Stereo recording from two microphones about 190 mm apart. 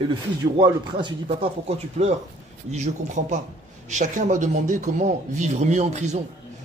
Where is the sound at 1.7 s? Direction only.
35° right (ahead or behind).